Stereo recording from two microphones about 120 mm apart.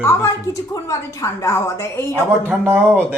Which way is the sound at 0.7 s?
25° left (ahead or behind).